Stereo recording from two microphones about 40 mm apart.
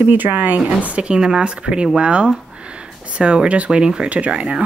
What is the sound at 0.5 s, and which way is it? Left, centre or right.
Speech, right.